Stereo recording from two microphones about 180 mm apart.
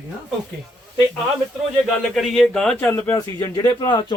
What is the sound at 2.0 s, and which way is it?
Speech, centre (ahead or behind).